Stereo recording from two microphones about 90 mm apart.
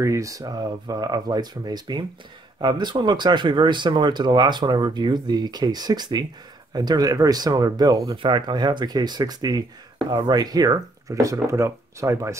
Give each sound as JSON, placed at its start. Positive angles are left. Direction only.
{"t": 0.0, "sound": "speech", "side_deg": -35}
{"t": 8.2, "sound": "speech", "side_deg": -60}